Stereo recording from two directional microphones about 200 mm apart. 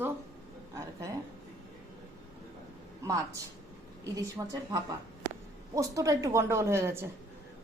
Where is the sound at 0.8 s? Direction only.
15° right (ahead or behind).